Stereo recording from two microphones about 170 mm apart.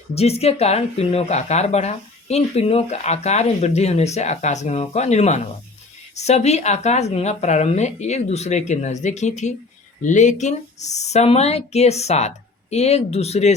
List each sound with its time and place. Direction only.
0.1 s speech: 40° left (ahead or behind)